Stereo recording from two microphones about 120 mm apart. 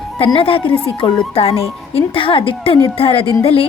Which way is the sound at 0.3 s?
50° left (ahead or behind).